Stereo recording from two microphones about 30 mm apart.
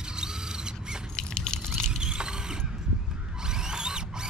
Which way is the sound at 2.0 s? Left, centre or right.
Right.